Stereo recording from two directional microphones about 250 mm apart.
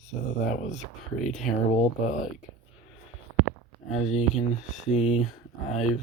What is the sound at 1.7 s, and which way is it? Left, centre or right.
Speech, left.